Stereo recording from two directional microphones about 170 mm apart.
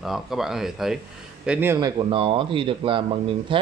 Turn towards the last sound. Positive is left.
turn(degrees=-30)  # may be behind; listen again after turning